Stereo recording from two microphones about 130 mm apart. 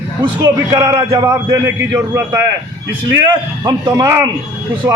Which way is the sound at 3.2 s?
35° right (ahead or behind).